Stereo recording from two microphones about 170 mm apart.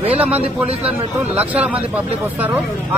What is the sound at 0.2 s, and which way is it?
A man's voice, 10° right (ahead or behind).